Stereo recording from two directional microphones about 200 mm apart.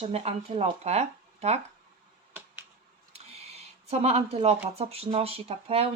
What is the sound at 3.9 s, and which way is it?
Speech, 30° right (ahead or behind).